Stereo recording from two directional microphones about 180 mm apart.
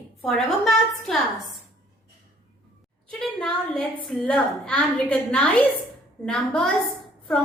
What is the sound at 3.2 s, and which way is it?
A woman's voice, 5° left (ahead or behind).